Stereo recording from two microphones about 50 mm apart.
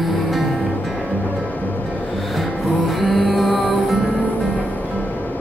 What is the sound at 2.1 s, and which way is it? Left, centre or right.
Music, centre.